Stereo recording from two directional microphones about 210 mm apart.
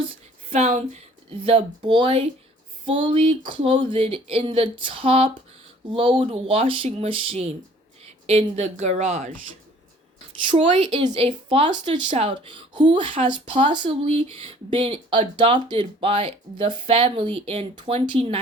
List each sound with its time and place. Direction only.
0.5 s a woman's voice: 30° right (ahead or behind)
10.8 s speech: 20° right (ahead or behind)